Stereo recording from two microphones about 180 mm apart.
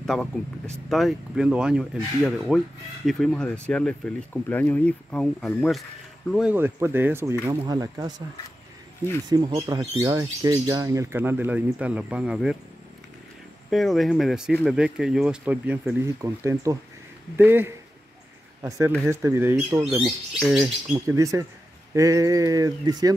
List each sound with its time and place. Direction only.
0.0 s speech: centre (ahead or behind)
7.6 s speech: 25° right (ahead or behind)
9.3 s speech: 20° right (ahead or behind); by 12.5 s 5° right (ahead or behind)
13.7 s speech: centre (ahead or behind)
20.3 s speech: centre (ahead or behind)
20.9 s speech: 20° right (ahead or behind)